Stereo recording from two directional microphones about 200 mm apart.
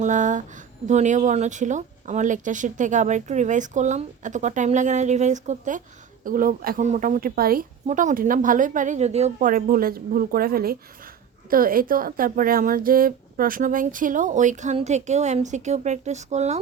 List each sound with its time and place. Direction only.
0.0 s a woman's voice: 40° right (ahead or behind)